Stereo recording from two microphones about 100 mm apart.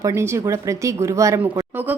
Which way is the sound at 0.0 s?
25° right (ahead or behind).